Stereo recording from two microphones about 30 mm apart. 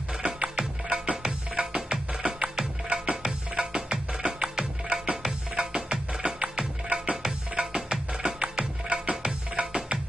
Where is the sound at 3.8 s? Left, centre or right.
Right.